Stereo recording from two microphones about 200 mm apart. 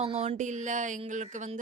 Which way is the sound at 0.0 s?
30° right (ahead or behind).